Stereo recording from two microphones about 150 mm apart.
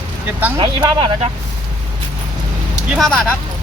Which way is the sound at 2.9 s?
5° left (ahead or behind).